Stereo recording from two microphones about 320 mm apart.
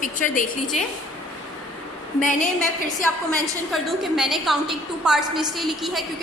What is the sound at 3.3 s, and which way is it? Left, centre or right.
A woman's voice, centre.